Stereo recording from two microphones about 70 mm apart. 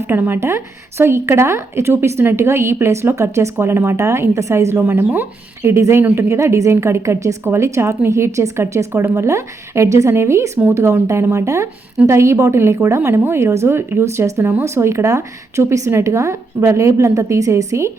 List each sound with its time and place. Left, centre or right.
0.1 s a woman's voice: right